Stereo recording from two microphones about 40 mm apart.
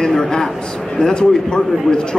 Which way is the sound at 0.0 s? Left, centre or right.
Centre.